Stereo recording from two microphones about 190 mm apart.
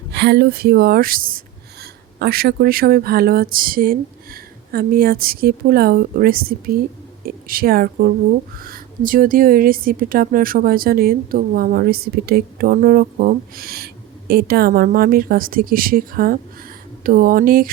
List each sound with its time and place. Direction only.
0.1 s speech: 60° right (ahead or behind)